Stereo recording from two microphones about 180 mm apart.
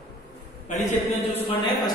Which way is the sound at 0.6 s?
40° left (ahead or behind).